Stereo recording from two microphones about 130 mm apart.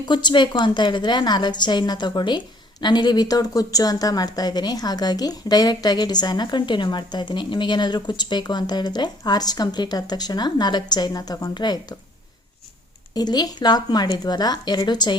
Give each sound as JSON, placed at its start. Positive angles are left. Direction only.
{"t": 0.0, "sound": "a woman's voice", "side_deg": 35}
{"t": 13.1, "sound": "a woman's voice", "side_deg": 30}